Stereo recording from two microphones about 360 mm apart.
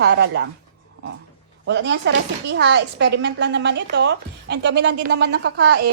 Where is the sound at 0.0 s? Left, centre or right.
Right.